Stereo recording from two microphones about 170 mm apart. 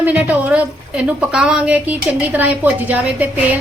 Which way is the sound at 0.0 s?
10° right (ahead or behind).